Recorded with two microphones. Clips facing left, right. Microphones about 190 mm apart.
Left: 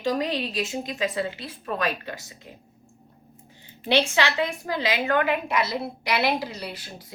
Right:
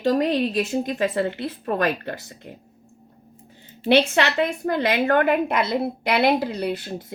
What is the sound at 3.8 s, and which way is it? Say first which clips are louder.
A woman's voice: right 4 dB; 55° right (ahead or behind).